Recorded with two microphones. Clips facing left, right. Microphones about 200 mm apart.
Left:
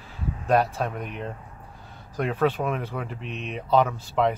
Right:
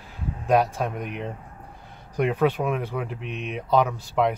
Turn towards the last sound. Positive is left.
turn(degrees=-10)  # may be behind; listen again after turning